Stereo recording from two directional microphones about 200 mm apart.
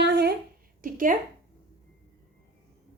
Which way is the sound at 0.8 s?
40° right (ahead or behind).